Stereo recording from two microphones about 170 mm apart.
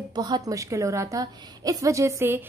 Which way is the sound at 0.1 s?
25° right (ahead or behind).